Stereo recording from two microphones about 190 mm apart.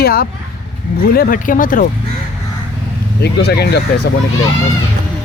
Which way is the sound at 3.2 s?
60° left (ahead or behind).